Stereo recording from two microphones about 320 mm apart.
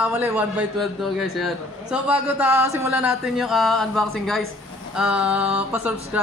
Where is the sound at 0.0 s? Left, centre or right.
Centre.